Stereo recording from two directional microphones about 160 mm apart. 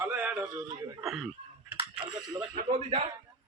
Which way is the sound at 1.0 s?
Centre (ahead or behind).